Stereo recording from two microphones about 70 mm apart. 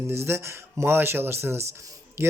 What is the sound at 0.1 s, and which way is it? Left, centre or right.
A man's voice, right.